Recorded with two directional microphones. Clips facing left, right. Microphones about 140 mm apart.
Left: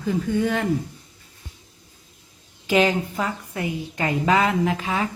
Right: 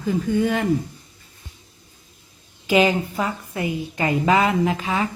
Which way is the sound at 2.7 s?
10° right (ahead or behind).